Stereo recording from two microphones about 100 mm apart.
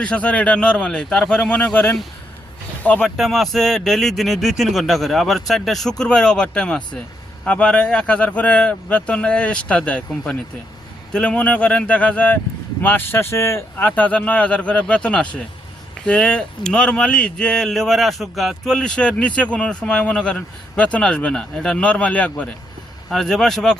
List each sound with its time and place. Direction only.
0.0 s speech: 10° left (ahead or behind)
3.2 s speech: centre (ahead or behind)
23.0 s speech: 5° left (ahead or behind)